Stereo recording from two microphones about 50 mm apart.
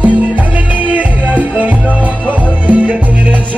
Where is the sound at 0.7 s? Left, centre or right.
Right.